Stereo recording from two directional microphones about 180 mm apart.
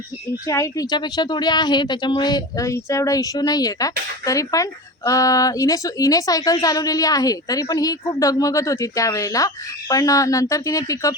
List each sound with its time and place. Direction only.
0.4 s speech: 20° left (ahead or behind)